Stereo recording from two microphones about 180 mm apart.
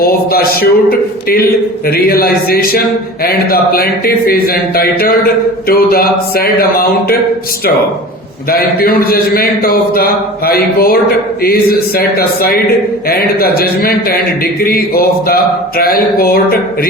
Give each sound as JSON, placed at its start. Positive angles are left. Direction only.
{"t": 0.0, "sound": "a man's voice", "side_deg": 55}
{"t": 8.4, "sound": "a man's voice", "side_deg": 55}